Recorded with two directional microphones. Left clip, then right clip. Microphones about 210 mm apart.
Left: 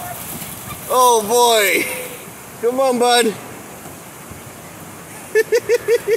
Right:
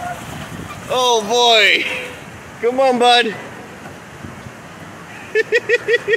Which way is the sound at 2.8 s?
5° right (ahead or behind).